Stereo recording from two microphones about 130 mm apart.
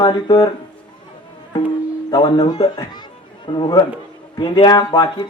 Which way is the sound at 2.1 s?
30° left (ahead or behind).